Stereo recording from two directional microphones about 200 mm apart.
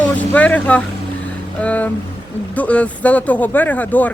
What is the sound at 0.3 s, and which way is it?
Speech, 5° left (ahead or behind).